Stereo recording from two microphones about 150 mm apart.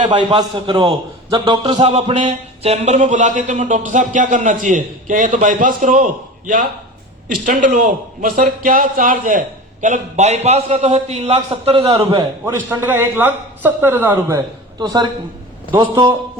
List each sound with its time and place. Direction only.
0.0 s a man's voice: 35° right (ahead or behind)
1.8 s speech: 40° right (ahead or behind); by 9.4 s 65° right (ahead or behind)
9.8 s a man's voice: 50° right (ahead or behind)
12.5 s a man's voice: 10° right (ahead or behind); by 16.1 s 30° right (ahead or behind)